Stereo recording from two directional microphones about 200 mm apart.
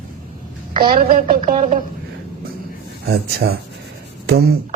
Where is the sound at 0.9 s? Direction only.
45° right (ahead or behind).